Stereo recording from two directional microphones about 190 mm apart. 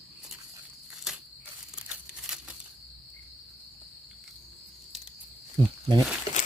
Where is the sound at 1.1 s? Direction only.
Centre (ahead or behind).